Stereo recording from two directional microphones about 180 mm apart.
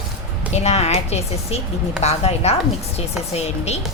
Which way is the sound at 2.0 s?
35° left (ahead or behind).